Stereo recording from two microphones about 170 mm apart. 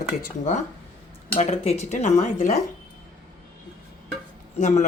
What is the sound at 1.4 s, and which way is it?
Speech, 40° left (ahead or behind).